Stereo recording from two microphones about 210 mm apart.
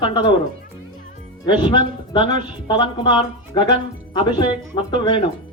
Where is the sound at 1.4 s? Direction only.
20° left (ahead or behind).